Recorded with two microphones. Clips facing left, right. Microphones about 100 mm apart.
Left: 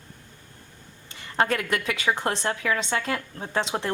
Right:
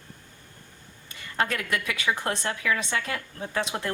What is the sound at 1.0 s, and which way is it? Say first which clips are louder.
A woman's voice: left 4 dB; 30° left (ahead or behind).